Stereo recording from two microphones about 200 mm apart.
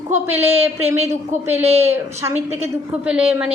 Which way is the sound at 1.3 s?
35° right (ahead or behind).